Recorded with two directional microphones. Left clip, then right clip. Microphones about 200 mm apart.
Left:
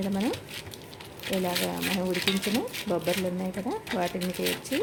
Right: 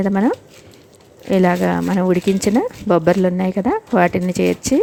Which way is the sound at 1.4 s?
50° right (ahead or behind).